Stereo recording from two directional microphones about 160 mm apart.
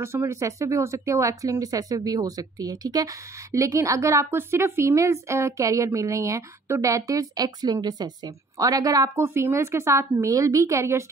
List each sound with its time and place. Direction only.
0.0 s a woman's voice: 15° right (ahead or behind)